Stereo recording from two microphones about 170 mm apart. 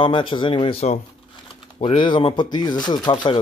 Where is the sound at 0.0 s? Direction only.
30° left (ahead or behind).